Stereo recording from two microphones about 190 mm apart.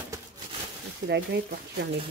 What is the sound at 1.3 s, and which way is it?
Speech, 65° right (ahead or behind).